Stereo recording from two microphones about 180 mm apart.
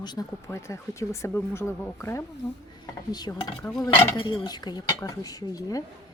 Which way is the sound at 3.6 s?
5° left (ahead or behind).